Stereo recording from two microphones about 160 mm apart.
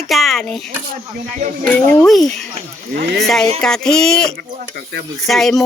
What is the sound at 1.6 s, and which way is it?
Speech, 10° left (ahead or behind).